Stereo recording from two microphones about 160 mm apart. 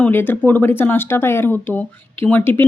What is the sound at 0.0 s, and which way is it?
Speech, 10° left (ahead or behind).